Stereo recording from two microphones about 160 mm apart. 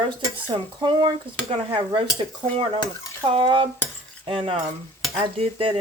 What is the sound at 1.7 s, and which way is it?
Stir, 35° right (ahead or behind).